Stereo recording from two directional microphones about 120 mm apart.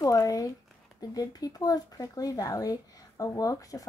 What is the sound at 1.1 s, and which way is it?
Speech, 30° left (ahead or behind).